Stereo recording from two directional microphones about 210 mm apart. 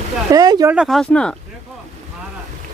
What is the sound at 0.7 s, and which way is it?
Speech, centre (ahead or behind).